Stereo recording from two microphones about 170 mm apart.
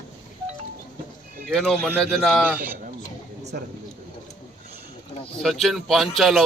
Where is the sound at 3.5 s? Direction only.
60° right (ahead or behind).